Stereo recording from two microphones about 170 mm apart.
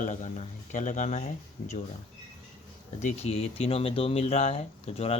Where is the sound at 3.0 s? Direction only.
40° left (ahead or behind).